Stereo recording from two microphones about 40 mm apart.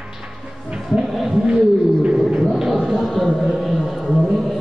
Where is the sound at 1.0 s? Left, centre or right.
Centre.